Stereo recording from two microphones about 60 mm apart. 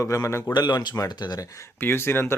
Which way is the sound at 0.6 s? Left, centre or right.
Left.